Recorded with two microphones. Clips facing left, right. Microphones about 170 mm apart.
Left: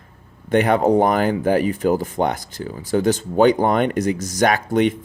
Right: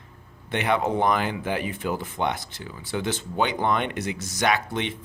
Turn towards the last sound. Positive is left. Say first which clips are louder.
# left 8 dB
turn(degrees=45)  # may be behind; listen again after turning